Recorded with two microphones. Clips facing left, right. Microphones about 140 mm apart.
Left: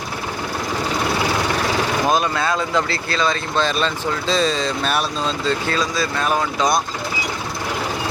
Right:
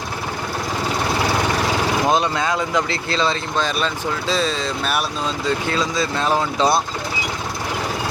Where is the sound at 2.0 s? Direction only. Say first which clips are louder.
Even; 20° right (ahead or behind).